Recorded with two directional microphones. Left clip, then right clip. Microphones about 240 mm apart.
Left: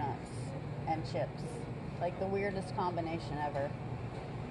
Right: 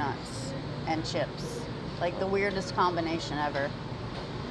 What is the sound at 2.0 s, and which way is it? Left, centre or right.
Speech, centre.